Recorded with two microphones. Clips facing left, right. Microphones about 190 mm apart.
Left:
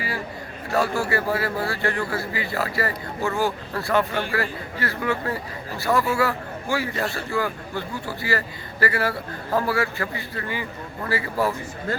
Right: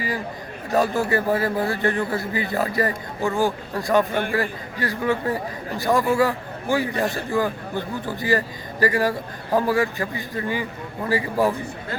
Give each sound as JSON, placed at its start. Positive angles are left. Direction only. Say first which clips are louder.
{"t": 0.7, "sound": "a man's voice", "louder": "right 2 dB", "side_deg": -20}